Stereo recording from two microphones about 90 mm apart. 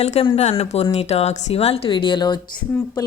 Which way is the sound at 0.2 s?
90° left.